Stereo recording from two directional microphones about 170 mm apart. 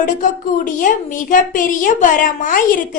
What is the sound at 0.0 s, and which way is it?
A woman's voice, 50° left (ahead or behind).